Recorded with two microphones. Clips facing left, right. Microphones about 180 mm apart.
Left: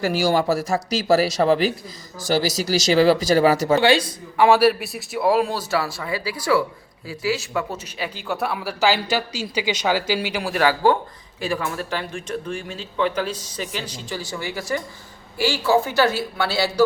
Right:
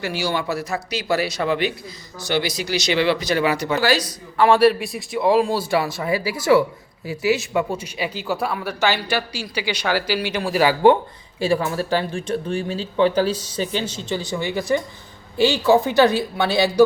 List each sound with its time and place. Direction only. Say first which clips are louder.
0.0 s speech: left 5 dB; 45° left (ahead or behind)
3.8 s speech: left 2 dB; 25° left (ahead or behind)
4.4 s a man's voice: right 1 dB; 10° left (ahead or behind)
5.5 s speech: right 3 dB; 20° right (ahead or behind)
7.0 s speech: right 5 dB; 30° left (ahead or behind)
7.3 s speech: right 4 dB; 20° right (ahead or behind); by 10.4 s 20° left (ahead or behind)
10.6 s speech: right 4 dB; 15° right (ahead or behind)
11.3 s speech: right 5 dB; 30° right (ahead or behind)